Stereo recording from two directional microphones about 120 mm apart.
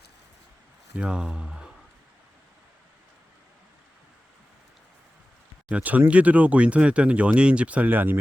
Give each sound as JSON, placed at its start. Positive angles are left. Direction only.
{"t": 0.9, "sound": "speech", "side_deg": -10}
{"t": 5.6, "sound": "speech", "side_deg": -10}